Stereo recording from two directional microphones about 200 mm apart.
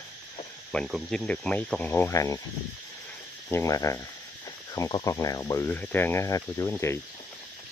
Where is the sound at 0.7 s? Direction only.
Centre (ahead or behind); by 2.4 s 15° left (ahead or behind).